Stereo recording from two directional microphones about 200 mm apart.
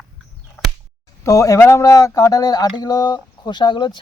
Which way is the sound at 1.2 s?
15° left (ahead or behind).